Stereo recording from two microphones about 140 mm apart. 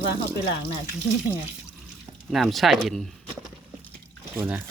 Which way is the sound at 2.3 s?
Centre (ahead or behind).